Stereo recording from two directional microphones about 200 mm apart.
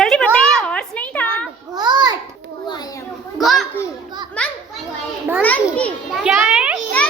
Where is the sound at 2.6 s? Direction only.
20° left (ahead or behind).